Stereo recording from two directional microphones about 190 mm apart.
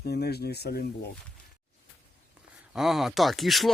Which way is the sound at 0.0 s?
55° left (ahead or behind).